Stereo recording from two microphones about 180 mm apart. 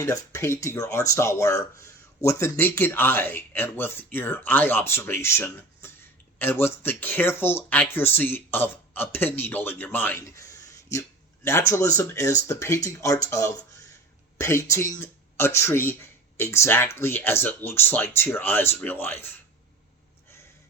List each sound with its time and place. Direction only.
0.0 s speech: 15° left (ahead or behind)